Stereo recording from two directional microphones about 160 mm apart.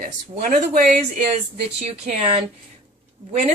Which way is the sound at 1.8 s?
40° right (ahead or behind).